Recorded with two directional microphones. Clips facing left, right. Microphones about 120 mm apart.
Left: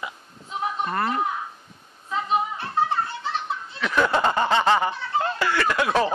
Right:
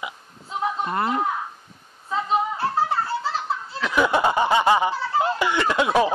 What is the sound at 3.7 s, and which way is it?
Snicker, 5° right (ahead or behind).